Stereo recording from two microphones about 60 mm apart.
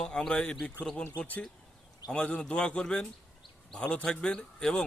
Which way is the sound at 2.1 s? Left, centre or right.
Centre.